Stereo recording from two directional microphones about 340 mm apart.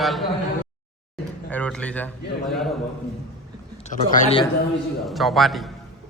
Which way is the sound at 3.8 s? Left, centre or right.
Left.